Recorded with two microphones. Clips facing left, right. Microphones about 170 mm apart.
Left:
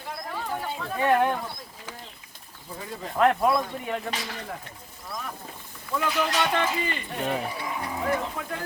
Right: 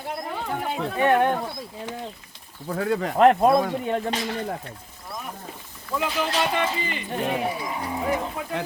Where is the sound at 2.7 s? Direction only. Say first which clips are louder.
Right 12 dB; 75° right (ahead or behind).